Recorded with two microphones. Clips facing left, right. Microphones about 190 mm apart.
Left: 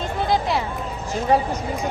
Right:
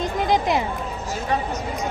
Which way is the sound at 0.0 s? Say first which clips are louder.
Right 1 dB; 20° right (ahead or behind).